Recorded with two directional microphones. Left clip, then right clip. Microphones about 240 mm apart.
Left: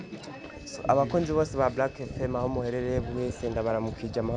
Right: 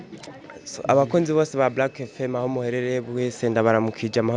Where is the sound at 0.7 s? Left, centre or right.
Right.